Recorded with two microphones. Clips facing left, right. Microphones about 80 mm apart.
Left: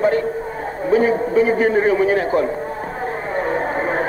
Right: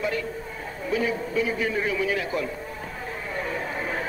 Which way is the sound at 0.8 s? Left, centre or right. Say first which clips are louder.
Left 10 dB; left.